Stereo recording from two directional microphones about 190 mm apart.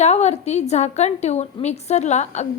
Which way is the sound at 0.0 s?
35° left (ahead or behind).